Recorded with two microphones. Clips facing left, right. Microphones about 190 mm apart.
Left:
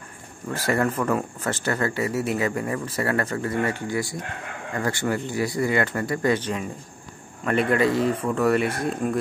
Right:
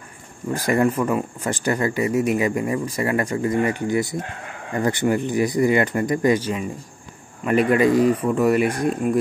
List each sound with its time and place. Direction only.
0.5 s speech: 15° right (ahead or behind)
7.7 s speech: 15° right (ahead or behind)